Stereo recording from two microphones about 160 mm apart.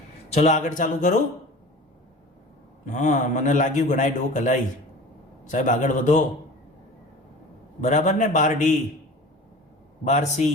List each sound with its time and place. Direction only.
0.3 s a man's voice: 50° left (ahead or behind)
2.8 s a man's voice: 50° left (ahead or behind)
7.8 s a man's voice: 50° left (ahead or behind)
10.0 s a man's voice: 45° left (ahead or behind)